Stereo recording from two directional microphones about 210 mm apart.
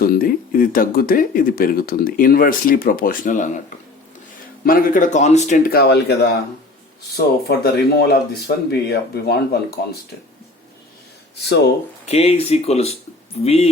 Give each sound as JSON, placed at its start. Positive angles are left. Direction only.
{"t": 0.0, "sound": "speech", "side_deg": 45}
{"t": 4.6, "sound": "speech", "side_deg": 45}
{"t": 11.4, "sound": "speech", "side_deg": 50}
{"t": 12.0, "sound": "speech", "side_deg": 30}